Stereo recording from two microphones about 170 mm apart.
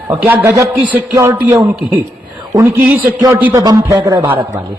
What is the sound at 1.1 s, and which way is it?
Speech, 25° right (ahead or behind).